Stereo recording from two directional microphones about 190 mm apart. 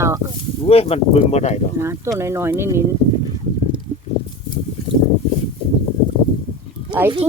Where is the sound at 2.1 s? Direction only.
15° right (ahead or behind).